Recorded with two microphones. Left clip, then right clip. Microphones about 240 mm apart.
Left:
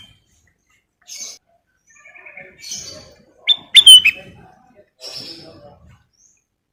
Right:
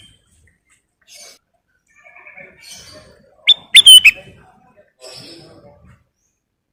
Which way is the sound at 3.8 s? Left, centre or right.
Right.